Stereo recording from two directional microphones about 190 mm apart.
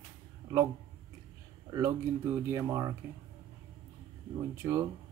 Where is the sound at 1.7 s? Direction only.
15° right (ahead or behind).